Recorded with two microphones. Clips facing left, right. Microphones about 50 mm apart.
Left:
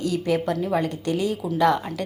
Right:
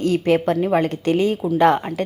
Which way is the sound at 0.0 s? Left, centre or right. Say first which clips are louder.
Right 6 dB; right.